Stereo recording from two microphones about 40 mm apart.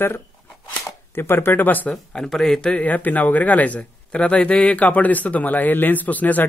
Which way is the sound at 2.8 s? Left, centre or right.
Left.